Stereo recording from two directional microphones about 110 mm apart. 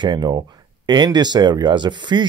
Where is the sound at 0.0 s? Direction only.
45° right (ahead or behind).